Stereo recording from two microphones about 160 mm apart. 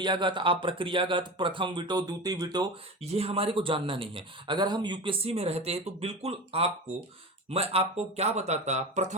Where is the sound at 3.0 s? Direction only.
40° right (ahead or behind).